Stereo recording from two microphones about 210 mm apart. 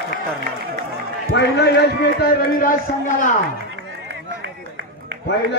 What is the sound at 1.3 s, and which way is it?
A man's voice, 50° left (ahead or behind).